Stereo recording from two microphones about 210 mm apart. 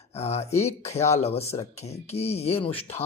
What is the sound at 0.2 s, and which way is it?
Speech, 30° left (ahead or behind).